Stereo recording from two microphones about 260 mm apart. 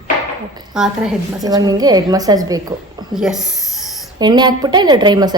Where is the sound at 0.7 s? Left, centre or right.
Centre.